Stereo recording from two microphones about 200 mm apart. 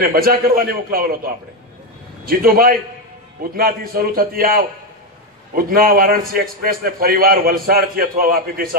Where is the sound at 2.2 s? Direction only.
45° right (ahead or behind).